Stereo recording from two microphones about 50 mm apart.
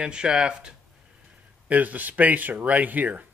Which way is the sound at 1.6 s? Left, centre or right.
Right.